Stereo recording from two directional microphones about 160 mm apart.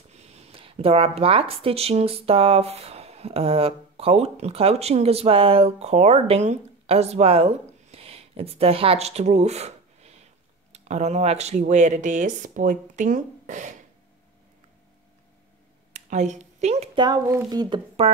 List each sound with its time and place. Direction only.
0.1 s speech: 40° right (ahead or behind)
16.1 s a woman's voice: 45° right (ahead or behind)
16.9 s speech: 25° right (ahead or behind)